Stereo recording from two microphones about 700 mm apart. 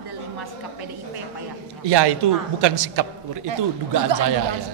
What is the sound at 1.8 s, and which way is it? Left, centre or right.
A man's voice, right.